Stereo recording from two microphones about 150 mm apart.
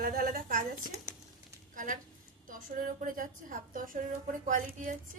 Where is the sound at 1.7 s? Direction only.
60° right (ahead or behind).